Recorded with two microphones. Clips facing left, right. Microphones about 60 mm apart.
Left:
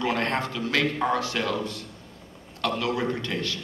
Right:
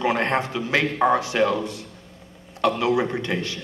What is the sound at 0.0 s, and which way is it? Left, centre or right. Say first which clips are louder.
A man's voice: right 4 dB; right.